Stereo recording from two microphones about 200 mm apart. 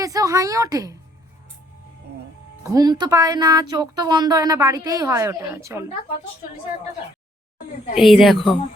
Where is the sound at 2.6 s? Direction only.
20° right (ahead or behind).